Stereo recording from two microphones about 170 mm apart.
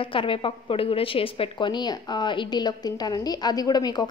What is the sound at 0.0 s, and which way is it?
A woman's voice, 30° left (ahead or behind).